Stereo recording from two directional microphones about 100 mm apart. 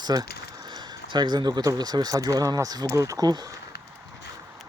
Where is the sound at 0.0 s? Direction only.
40° right (ahead or behind).